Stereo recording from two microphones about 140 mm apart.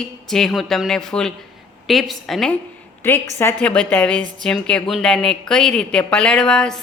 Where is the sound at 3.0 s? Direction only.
15° left (ahead or behind).